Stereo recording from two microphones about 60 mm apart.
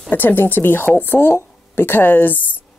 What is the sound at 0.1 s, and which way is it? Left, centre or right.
Speech, left.